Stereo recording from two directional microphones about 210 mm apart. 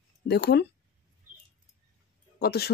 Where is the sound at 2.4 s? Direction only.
50° left (ahead or behind).